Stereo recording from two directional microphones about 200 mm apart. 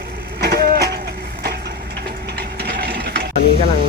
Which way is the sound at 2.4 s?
55° right (ahead or behind).